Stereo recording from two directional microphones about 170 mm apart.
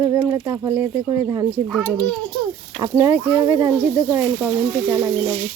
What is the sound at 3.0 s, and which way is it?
Speech, 15° right (ahead or behind).